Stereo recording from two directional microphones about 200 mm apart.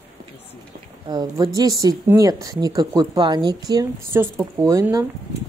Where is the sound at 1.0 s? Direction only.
20° right (ahead or behind).